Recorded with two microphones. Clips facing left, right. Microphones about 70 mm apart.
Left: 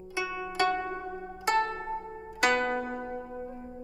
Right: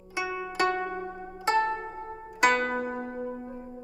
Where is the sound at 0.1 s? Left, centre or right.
Right.